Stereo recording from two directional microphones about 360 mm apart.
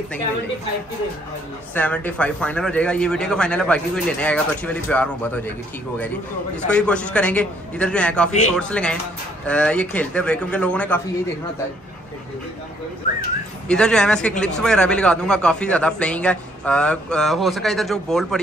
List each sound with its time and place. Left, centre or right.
1.7 s speech: centre
6.7 s speech: centre
13.7 s speech: centre